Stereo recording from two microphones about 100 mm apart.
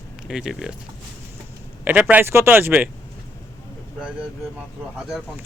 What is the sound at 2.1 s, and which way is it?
Speech, 25° right (ahead or behind).